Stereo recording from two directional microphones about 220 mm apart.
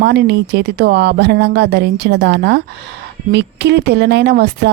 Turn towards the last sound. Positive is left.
turn(degrees=-50)  # may be behind; listen again after turning